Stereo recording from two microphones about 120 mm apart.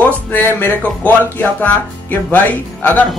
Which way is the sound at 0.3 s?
15° left (ahead or behind).